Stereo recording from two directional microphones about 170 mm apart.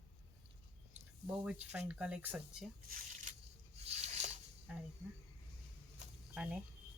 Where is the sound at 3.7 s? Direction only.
40° right (ahead or behind).